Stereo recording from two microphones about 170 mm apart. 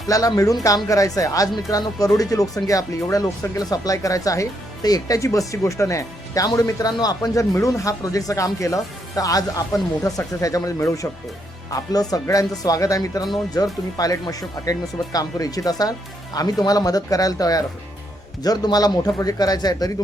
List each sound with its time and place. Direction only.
0.1 s speech: 20° left (ahead or behind)